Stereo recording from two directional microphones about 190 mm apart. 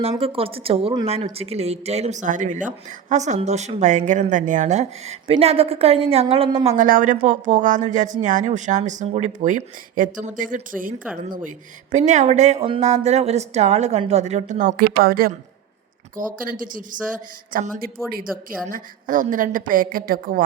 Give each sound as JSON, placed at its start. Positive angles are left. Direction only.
{"t": 0.0, "sound": "speech", "side_deg": -30}
{"t": 6.7, "sound": "a woman's voice", "side_deg": -45}